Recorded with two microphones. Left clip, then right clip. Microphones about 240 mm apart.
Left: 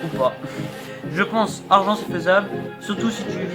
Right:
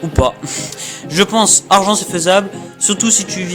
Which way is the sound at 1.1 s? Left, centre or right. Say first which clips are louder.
Right 8 dB; right.